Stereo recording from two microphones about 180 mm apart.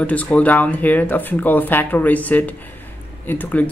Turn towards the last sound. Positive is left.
turn(degrees=10)  # may be behind; listen again after turning